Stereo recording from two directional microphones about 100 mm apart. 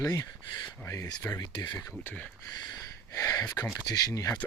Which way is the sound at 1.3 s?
45° left (ahead or behind).